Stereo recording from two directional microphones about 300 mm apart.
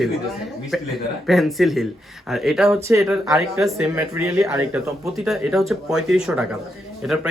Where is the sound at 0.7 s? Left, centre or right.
Centre.